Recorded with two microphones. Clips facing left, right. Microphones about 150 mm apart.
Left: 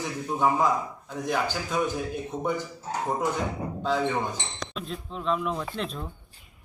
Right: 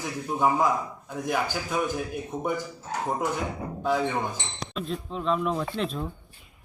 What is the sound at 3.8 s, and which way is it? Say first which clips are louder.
Speech: right 1 dB; 10° right (ahead or behind).